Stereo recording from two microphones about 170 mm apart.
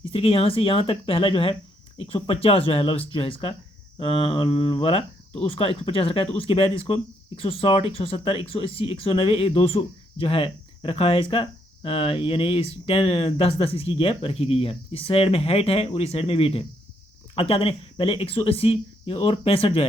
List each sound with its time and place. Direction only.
0.1 s speech: 35° left (ahead or behind)